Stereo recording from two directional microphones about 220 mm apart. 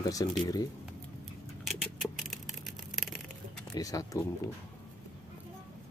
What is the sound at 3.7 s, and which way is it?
Speech, 15° left (ahead or behind).